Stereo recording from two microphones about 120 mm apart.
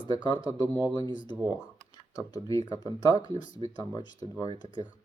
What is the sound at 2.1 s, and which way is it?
Speech, 30° left (ahead or behind).